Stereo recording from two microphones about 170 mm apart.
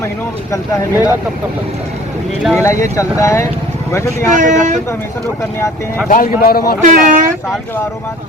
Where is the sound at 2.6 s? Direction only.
20° left (ahead or behind).